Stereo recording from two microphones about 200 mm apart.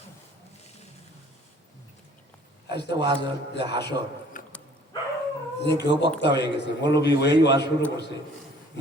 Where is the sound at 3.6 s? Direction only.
55° left (ahead or behind).